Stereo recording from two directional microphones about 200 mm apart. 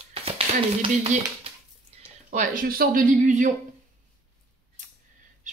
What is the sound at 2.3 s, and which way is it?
Speech, 40° right (ahead or behind).